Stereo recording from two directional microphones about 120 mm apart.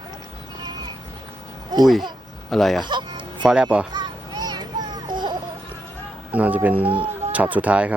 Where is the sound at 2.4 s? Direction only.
Centre (ahead or behind).